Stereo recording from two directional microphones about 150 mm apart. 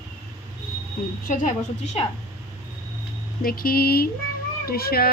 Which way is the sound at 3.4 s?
80° left.